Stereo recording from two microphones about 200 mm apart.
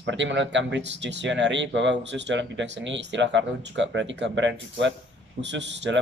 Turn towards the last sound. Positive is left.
turn(degrees=-60)  # may be behind; listen again after turning